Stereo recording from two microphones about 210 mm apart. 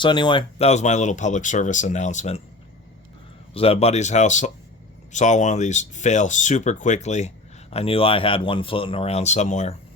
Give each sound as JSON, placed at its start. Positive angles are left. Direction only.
{"t": 0.0, "sound": "speech", "side_deg": 20}
{"t": 3.5, "sound": "speech", "side_deg": 25}